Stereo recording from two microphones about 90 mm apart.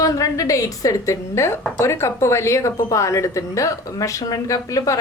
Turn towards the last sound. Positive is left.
turn(degrees=40)  # may be behind; listen again after turning